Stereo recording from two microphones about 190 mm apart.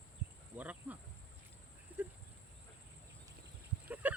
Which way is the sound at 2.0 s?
10° right (ahead or behind).